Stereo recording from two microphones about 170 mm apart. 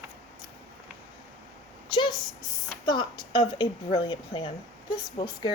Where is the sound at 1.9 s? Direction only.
25° left (ahead or behind).